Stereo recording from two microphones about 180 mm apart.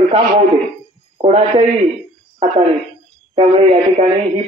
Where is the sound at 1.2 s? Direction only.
35° right (ahead or behind).